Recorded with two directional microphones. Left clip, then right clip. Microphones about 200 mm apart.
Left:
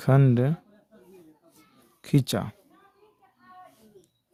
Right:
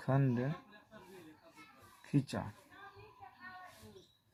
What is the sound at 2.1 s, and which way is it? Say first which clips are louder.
Speech: left 11 dB; 90° left.